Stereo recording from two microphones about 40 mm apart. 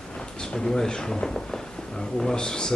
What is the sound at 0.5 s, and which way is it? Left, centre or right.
A man's voice, centre.